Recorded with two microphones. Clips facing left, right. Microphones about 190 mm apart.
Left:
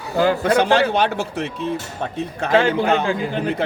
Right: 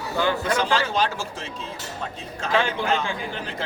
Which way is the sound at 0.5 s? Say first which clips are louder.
Left 7 dB; 60° left (ahead or behind).